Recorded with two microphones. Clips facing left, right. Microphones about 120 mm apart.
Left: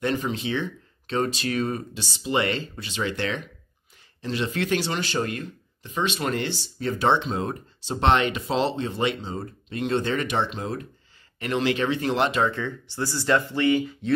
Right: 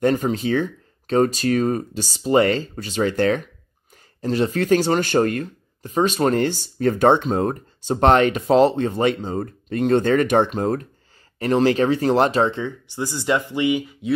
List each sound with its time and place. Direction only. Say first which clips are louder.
0.0 s speech: right 7 dB; 45° right (ahead or behind)
12.4 s speech: right 3 dB; 20° right (ahead or behind)